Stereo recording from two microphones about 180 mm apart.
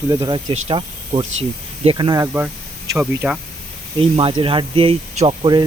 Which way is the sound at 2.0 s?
20° right (ahead or behind).